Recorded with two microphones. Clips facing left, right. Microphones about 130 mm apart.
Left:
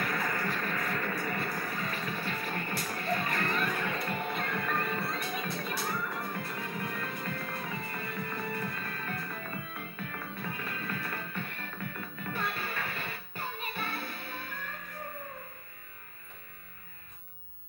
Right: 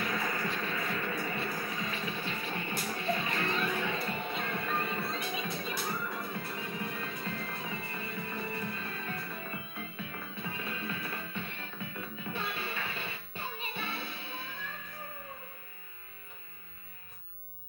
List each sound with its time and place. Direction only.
0.0 s music: 50° left (ahead or behind)